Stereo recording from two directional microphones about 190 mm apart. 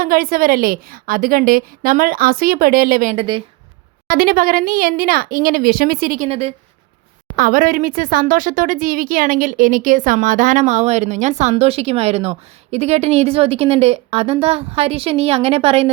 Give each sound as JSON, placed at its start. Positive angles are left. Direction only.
{"t": 0.0, "sound": "a woman's voice", "side_deg": -50}
{"t": 6.2, "sound": "speech", "side_deg": -30}
{"t": 7.3, "sound": "speech", "side_deg": -45}